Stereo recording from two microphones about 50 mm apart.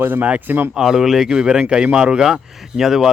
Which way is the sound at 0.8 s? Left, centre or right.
Centre.